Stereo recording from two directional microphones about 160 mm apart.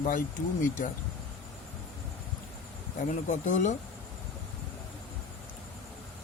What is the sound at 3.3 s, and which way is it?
Speech, 50° left (ahead or behind).